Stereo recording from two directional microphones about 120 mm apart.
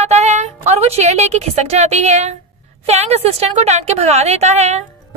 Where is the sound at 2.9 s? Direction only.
60° right (ahead or behind).